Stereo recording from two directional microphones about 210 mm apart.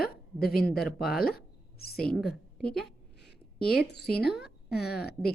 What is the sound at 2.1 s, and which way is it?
A woman's voice, centre (ahead or behind).